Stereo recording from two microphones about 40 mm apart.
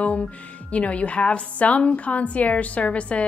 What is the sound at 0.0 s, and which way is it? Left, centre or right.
A woman's voice, left.